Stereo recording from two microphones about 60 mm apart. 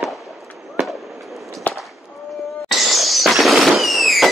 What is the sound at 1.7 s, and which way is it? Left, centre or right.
Fireworks, left.